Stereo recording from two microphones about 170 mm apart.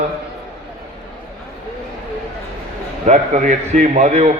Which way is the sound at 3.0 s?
45° right (ahead or behind).